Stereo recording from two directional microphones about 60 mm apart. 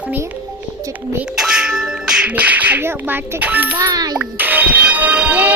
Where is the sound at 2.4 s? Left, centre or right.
Right.